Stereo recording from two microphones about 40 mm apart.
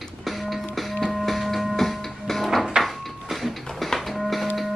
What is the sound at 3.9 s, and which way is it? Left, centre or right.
Music, centre.